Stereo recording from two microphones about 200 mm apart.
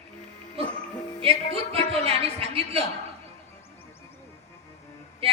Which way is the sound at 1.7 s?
30° right (ahead or behind).